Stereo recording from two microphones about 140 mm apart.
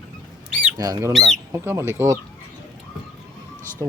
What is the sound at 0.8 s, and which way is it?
Speech, 25° right (ahead or behind).